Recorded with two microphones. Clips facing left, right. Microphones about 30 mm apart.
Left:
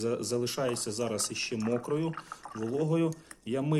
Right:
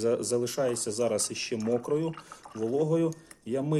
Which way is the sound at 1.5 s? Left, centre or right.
Left.